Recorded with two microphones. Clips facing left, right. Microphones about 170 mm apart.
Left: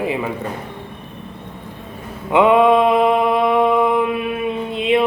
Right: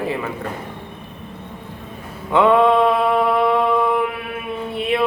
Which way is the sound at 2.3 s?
15° left (ahead or behind).